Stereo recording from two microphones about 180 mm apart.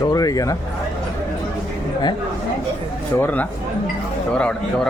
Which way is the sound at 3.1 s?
10° left (ahead or behind).